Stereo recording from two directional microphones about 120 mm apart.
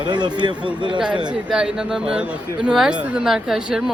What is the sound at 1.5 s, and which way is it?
Speech, 5° right (ahead or behind).